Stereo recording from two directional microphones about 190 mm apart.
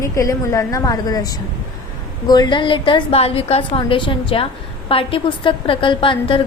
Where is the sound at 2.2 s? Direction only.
20° left (ahead or behind).